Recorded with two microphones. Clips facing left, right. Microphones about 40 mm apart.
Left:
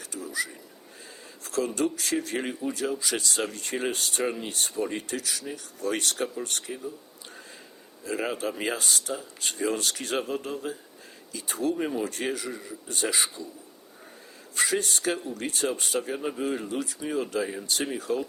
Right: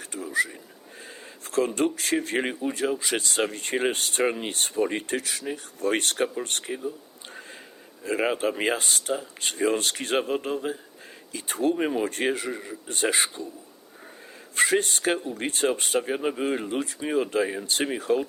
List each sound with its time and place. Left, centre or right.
0.0 s a sound: right
1.5 s speech: right
8.0 s speech: right
11.7 s speech: right
14.5 s speech: right